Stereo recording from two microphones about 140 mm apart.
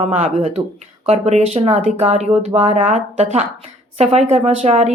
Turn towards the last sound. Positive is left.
turn(degrees=-50)  # may be behind; listen again after turning